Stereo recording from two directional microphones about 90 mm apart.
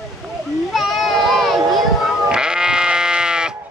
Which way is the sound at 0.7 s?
Centre (ahead or behind).